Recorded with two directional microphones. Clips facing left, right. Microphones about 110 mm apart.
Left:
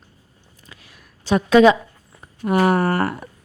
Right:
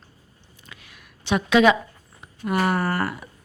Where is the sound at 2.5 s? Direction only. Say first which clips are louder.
Left 5 dB; 45° left (ahead or behind).